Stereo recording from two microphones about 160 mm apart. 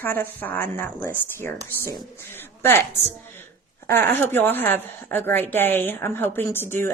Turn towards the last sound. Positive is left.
turn(degrees=15)  # may be behind; listen again after turning